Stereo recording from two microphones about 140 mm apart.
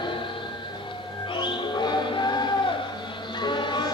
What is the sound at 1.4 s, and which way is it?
Music, 30° left (ahead or behind).